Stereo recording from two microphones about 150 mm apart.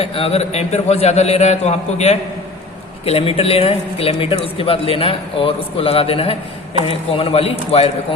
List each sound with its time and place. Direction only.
0.0 s a man's voice: 40° left (ahead or behind)